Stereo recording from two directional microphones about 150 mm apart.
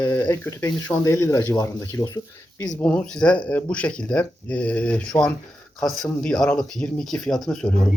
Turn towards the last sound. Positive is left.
turn(degrees=5)  # may be behind; listen again after turning